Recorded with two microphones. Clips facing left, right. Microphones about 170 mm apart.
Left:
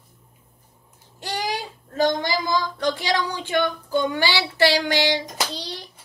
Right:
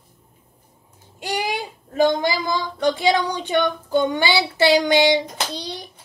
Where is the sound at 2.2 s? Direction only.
10° right (ahead or behind).